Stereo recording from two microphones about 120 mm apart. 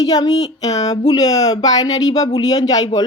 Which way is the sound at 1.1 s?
30° left (ahead or behind).